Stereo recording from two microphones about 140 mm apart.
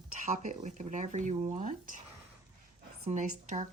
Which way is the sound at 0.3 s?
60° right (ahead or behind).